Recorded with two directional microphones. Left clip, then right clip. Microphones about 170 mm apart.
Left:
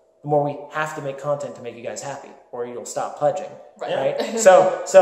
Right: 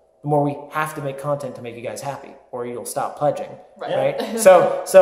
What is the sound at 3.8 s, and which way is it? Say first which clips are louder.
Speech: even; centre (ahead or behind).